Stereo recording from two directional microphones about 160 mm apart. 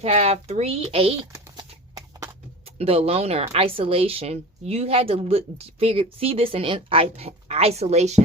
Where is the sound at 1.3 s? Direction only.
20° right (ahead or behind).